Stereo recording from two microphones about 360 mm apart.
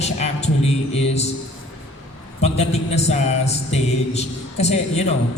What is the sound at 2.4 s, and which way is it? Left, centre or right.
Speech, centre.